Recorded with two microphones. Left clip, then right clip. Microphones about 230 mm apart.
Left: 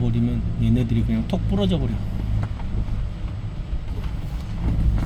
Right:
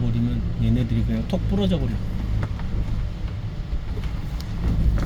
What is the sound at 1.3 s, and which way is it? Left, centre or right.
Speech, centre.